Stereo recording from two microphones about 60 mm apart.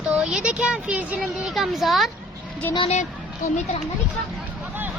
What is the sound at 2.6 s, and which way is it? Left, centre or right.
Speech, left.